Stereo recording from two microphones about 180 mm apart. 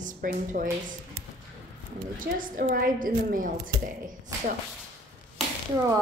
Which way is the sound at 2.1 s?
50° right (ahead or behind).